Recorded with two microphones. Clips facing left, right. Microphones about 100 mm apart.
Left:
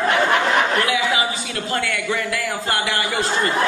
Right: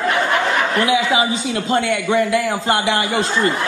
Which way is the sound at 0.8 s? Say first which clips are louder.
Right 4 dB; 20° right (ahead or behind).